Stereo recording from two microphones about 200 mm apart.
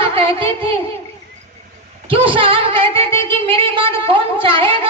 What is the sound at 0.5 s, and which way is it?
Speech, 25° right (ahead or behind).